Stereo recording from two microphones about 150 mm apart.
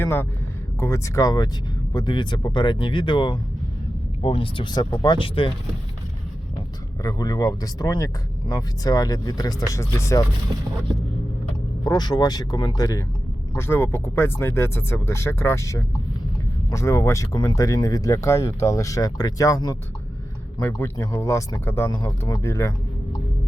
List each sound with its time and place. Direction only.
0.0 s speech: 15° left (ahead or behind); by 5.5 s 35° left (ahead or behind)
7.0 s speech: 25° left (ahead or behind)
11.8 s speech: 25° left (ahead or behind)